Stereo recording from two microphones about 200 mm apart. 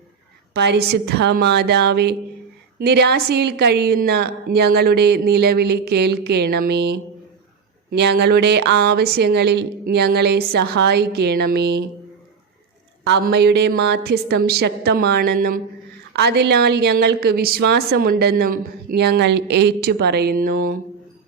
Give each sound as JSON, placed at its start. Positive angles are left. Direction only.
{"t": 0.5, "sound": "a woman's voice", "side_deg": -55}
{"t": 13.1, "sound": "a woman's voice", "side_deg": -55}